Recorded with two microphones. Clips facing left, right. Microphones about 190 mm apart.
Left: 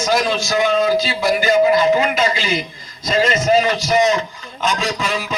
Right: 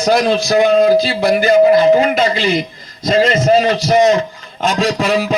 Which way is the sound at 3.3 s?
35° right (ahead or behind).